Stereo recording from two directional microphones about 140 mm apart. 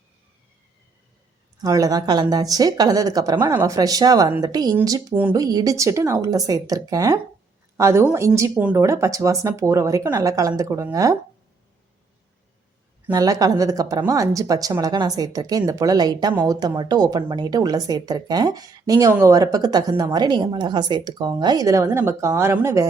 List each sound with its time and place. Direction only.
1.6 s a woman's voice: 25° right (ahead or behind)
5.1 s a woman's voice: 15° right (ahead or behind)
5.4 s a woman's voice: 25° right (ahead or behind)
13.1 s a woman's voice: 25° right (ahead or behind)
16.3 s a woman's voice: 15° right (ahead or behind)
16.6 s a woman's voice: 30° right (ahead or behind)